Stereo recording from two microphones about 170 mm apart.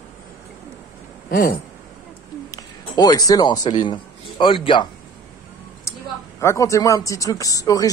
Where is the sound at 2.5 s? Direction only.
25° left (ahead or behind).